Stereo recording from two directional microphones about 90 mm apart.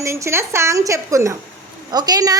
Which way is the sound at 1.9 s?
50° right (ahead or behind).